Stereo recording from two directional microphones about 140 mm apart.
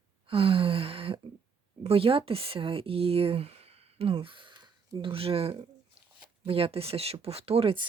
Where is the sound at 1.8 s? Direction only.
40° right (ahead or behind).